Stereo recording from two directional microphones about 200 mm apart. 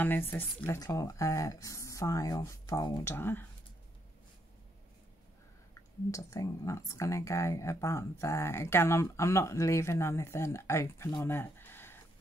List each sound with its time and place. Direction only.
0.0 s speech: 10° left (ahead or behind)
6.1 s speech: 15° left (ahead or behind)